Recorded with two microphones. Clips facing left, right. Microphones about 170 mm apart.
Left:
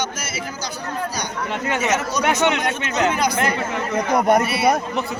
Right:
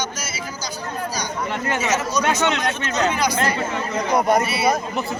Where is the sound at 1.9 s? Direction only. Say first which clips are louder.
Even; 60° left (ahead or behind).